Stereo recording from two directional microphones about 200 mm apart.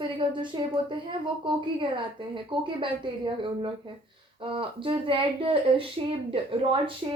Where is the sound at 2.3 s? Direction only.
25° right (ahead or behind).